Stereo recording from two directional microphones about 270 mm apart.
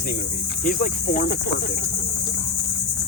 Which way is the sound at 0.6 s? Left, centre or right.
Left.